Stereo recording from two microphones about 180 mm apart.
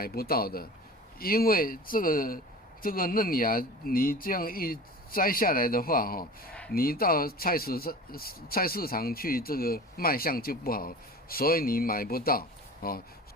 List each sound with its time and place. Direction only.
0.0 s speech: 55° left (ahead or behind)
6.5 s a sound: 5° left (ahead or behind)
6.7 s speech: 55° left (ahead or behind)